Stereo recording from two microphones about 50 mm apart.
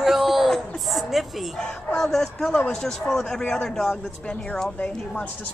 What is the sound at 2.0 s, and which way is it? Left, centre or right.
A man's voice, centre.